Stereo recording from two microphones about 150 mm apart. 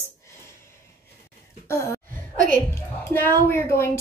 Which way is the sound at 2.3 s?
65° right (ahead or behind).